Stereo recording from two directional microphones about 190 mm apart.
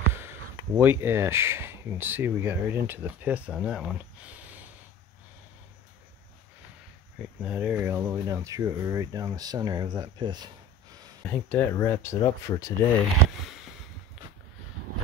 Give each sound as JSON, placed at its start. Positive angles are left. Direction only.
{"t": 0.7, "sound": "speech", "side_deg": -10}
{"t": 7.2, "sound": "speech", "side_deg": -5}
{"t": 11.2, "sound": "speech", "side_deg": 10}